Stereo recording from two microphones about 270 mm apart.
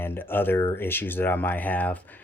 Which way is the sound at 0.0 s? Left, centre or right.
Centre.